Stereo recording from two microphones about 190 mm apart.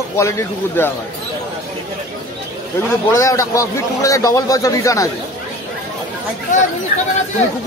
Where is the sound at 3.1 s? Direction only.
15° left (ahead or behind).